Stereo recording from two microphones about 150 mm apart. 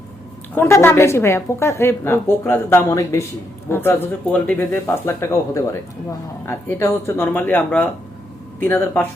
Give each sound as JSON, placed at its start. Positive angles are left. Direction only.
{"t": 0.5, "sound": "a woman's voice", "side_deg": 15}